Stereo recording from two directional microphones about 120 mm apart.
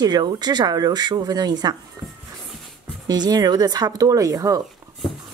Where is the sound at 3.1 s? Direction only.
35° right (ahead or behind).